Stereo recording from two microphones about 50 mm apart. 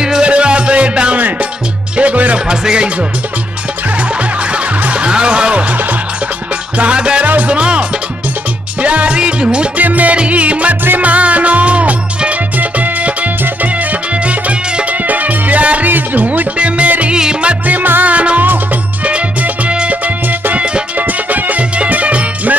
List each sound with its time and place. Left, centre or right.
0.0 s music: centre
2.4 s music: centre
4.5 s music: right
8.8 s music: right
9.8 s music: right
17.1 s music: centre
17.7 s music: right
18.1 s music: right
20.2 s music: right